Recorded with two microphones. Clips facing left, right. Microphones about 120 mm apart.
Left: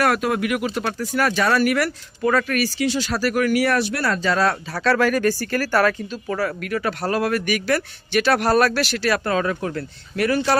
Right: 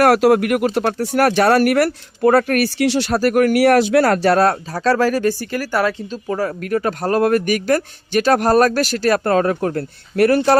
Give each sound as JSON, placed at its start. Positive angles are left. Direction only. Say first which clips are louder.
{"t": 0.0, "sound": "speech", "louder": "right 8 dB", "side_deg": -65}
{"t": 3.1, "sound": "speech", "louder": "right 6 dB", "side_deg": -50}
{"t": 4.7, "sound": "speech", "louder": "right 3 dB", "side_deg": -35}
{"t": 6.4, "sound": "speech", "louder": "right 4 dB", "side_deg": -40}